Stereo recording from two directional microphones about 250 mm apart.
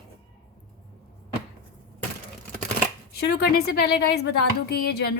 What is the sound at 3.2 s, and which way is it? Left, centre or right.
A woman's voice, left.